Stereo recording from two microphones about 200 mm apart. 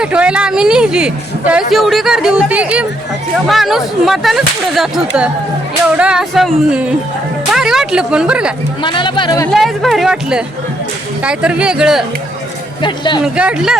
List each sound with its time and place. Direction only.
0.0 s speech: 5° right (ahead or behind)
8.8 s speech: 25° left (ahead or behind)
9.5 s speech: centre (ahead or behind)
12.8 s speech: 20° left (ahead or behind)
13.2 s speech: 5° right (ahead or behind)